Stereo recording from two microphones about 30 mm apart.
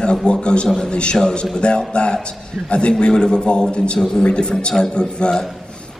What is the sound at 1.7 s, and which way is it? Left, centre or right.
Speech, left.